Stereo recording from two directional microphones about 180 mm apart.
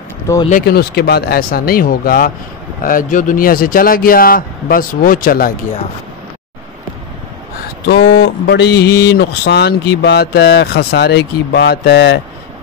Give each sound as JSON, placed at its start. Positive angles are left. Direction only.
{"t": 0.5, "sound": "speech", "side_deg": 55}
{"t": 7.9, "sound": "speech", "side_deg": 65}